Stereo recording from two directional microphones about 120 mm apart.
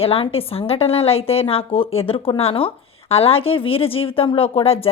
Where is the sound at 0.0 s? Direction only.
50° left (ahead or behind).